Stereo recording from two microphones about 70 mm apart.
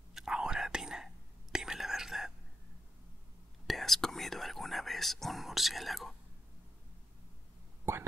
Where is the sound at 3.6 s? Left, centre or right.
Centre.